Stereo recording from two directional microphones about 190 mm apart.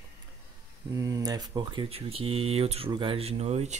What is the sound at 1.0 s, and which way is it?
Speech, 20° right (ahead or behind).